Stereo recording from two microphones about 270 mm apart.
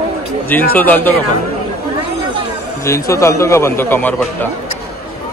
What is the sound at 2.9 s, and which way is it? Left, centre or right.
A man's voice, centre.